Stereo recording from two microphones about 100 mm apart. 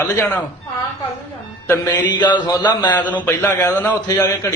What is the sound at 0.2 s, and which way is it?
Speech, 25° left (ahead or behind).